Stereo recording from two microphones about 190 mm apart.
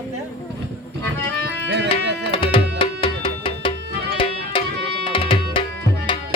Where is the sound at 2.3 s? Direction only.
30° left (ahead or behind).